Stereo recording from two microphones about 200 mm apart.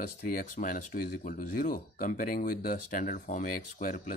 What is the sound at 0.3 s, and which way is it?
Speech, 45° left (ahead or behind).